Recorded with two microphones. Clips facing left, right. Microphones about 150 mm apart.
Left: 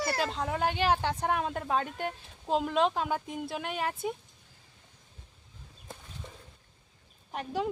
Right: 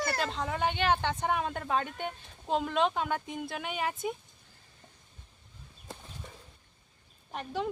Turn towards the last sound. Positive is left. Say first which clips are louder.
# left 2 dB
turn(degrees=5)  # may be behind; listen again after turning